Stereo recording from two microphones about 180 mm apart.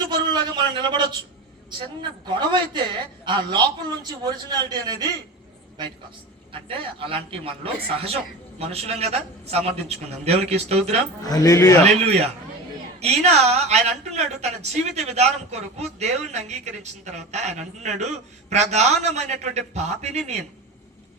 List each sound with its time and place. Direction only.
0.1 s a man's voice: 25° right (ahead or behind)
6.5 s speech: 30° right (ahead or behind)
11.2 s a man's voice: 20° left (ahead or behind)
11.9 s speech: 35° right (ahead or behind)